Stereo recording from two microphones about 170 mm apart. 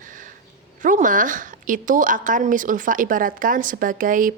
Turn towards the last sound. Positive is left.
turn(degrees=-50)  # may be behind; listen again after turning